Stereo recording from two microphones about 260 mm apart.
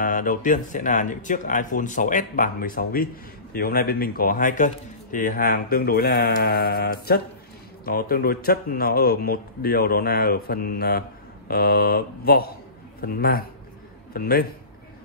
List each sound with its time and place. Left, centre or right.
0.0 s speech: left